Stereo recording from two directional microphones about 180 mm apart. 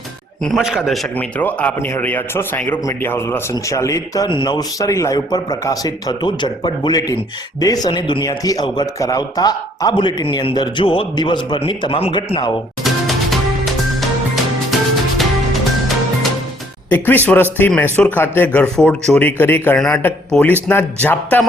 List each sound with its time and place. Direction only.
0.4 s a man's voice: centre (ahead or behind); by 12.5 s 25° left (ahead or behind)
12.8 s music: centre (ahead or behind)
16.9 s a man's voice: 10° left (ahead or behind)